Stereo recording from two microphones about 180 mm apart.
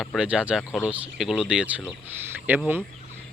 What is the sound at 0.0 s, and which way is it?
A man's voice, 5° right (ahead or behind).